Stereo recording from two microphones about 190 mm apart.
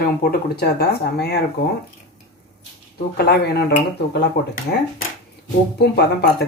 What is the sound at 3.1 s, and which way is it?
Speech, 55° left (ahead or behind).